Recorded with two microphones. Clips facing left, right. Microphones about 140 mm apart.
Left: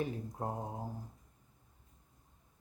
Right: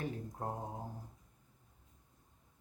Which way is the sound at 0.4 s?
15° left (ahead or behind).